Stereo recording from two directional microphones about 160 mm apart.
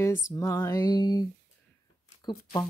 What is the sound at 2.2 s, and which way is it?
Speech, 25° left (ahead or behind).